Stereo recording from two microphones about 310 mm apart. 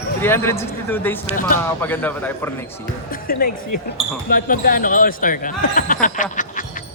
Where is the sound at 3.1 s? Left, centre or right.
Left.